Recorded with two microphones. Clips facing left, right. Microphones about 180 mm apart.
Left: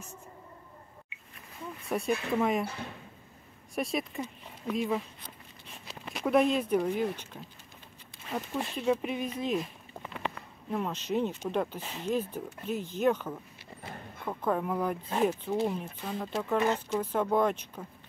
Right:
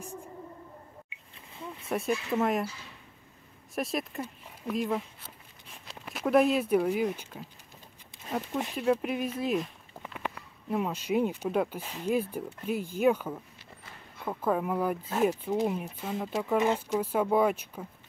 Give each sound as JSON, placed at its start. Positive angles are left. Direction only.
{"t": 1.9, "sound": "speech", "side_deg": 0}
{"t": 2.6, "sound": "speech", "side_deg": 60}
{"t": 3.7, "sound": "speech", "side_deg": 0}
{"t": 8.5, "sound": "speech", "side_deg": -10}
{"t": 13.8, "sound": "a sound", "side_deg": 50}
{"t": 14.2, "sound": "speech", "side_deg": -5}